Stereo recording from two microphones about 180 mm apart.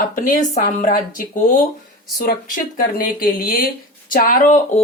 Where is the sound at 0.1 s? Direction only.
45° left (ahead or behind).